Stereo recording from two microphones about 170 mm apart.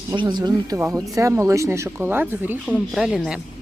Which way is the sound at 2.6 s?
Centre (ahead or behind).